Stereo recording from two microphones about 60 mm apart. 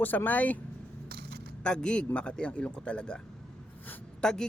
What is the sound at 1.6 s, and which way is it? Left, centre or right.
Speech, centre.